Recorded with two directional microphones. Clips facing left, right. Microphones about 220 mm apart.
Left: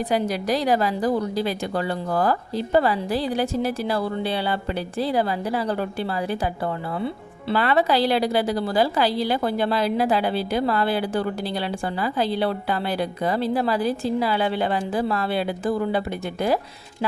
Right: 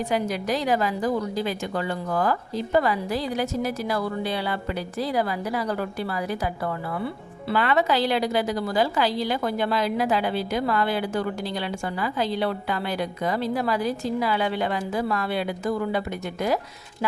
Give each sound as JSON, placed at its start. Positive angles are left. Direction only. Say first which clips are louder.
{"t": 0.0, "sound": "a woman's voice", "louder": "left 2 dB", "side_deg": 35}